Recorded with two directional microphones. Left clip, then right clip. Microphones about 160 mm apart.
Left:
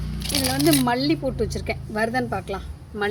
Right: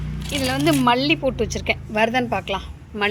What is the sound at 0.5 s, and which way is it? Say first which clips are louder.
Speech: right 3 dB; 10° left (ahead or behind).